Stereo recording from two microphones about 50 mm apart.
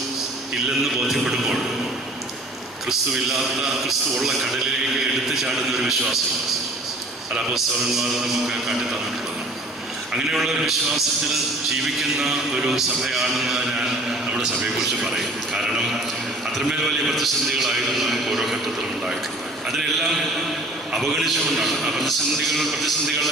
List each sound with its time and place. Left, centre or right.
0.8 s a man's voice: centre
2.8 s a man's voice: centre
7.5 s a man's voice: centre
10.1 s a man's voice: centre
11.7 s music: centre
14.8 s a man's voice: centre